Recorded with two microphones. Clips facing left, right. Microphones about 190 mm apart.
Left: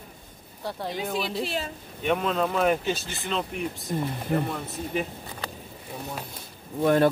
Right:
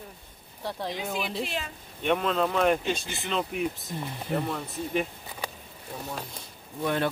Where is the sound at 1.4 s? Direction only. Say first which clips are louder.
Left 4 dB; 40° left (ahead or behind).